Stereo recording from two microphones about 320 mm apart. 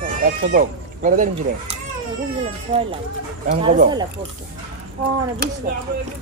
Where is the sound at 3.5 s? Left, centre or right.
Right.